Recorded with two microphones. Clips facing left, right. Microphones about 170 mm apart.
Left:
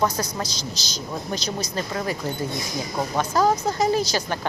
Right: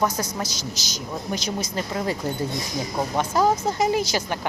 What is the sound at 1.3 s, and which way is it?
Speech, 10° right (ahead or behind).